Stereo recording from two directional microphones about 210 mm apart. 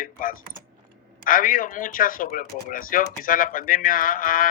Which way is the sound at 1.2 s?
40° left (ahead or behind).